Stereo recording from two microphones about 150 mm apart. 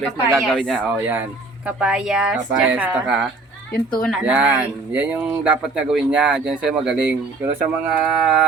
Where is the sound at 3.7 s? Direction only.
85° left.